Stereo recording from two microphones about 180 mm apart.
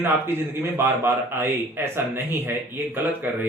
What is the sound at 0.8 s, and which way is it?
Speech, 15° right (ahead or behind).